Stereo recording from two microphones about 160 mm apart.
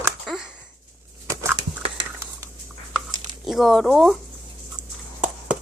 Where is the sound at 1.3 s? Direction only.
20° right (ahead or behind).